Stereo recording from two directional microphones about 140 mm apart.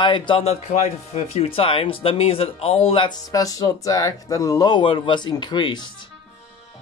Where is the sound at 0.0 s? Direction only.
35° left (ahead or behind).